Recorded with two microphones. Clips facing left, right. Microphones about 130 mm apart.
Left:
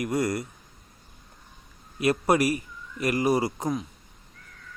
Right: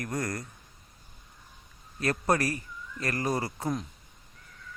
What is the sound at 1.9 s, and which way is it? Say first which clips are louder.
A man's voice: left 5 dB; 10° left (ahead or behind).